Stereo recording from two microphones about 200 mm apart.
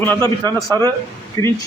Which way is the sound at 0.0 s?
10° left (ahead or behind).